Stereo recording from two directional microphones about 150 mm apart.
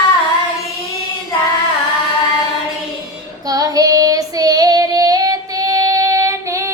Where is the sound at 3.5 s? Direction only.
25° right (ahead or behind).